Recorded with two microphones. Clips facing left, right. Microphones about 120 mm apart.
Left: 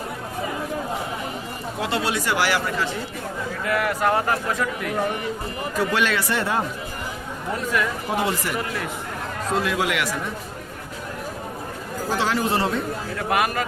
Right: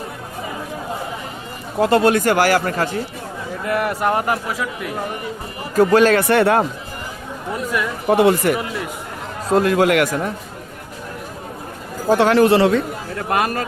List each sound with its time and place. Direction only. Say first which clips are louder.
1.8 s speech: right 11 dB; 50° right (ahead or behind)
3.7 s a man's voice: right 2 dB; 25° right (ahead or behind)
4.4 s speech: even; 5° right (ahead or behind)
5.7 s speech: right 10 dB; 45° right (ahead or behind)
6.2 s speech: right 9 dB; 60° right (ahead or behind)
8.1 s speech: right 12 dB; 65° right (ahead or behind)
9.5 s speech: right 9 dB; 45° right (ahead or behind)
12.0 s a man's voice: right 10 dB; 55° right (ahead or behind); by 12.8 s 85° right
13.3 s speech: right 2 dB; 35° right (ahead or behind)